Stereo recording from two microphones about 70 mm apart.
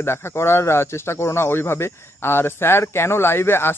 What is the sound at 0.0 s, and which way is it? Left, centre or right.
Speech, left.